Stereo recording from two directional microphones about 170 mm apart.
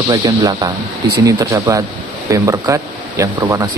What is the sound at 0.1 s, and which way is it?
Speech, 25° right (ahead or behind).